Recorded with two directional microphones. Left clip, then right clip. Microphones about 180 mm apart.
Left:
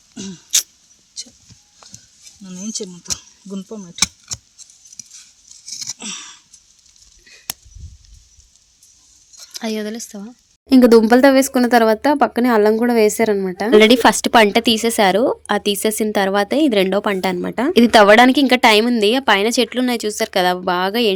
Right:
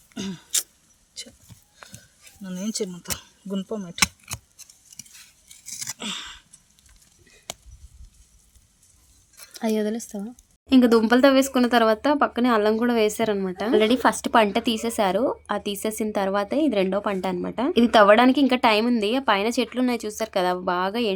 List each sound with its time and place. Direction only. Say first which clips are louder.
0.1 s vehicle: left 8 dB; 10° right (ahead or behind)
2.4 s a sound: left 2 dB; 15° right (ahead or behind)
2.9 s speech: left 6 dB; 10° right (ahead or behind)
5.6 s scissors: left 6 dB; 40° right (ahead or behind)
5.9 s a sound: left 2 dB; 5° right (ahead or behind)
9.5 s speech: left 1 dB; centre (ahead or behind)
10.7 s a woman's voice: left 8 dB; 30° left (ahead or behind)